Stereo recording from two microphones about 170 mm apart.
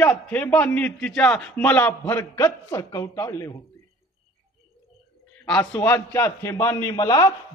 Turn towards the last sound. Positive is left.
turn(degrees=20)  # may be behind; listen again after turning